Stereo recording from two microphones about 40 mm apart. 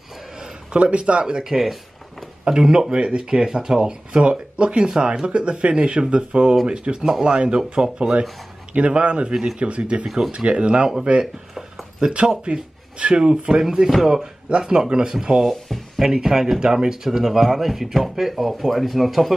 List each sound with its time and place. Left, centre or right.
0.7 s speech: right
1.2 s speech: centre
4.2 s speech: right
7.0 s speech: centre
8.7 s speech: right
10.0 s speech: centre
10.3 s speech: right; by 19.3 s centre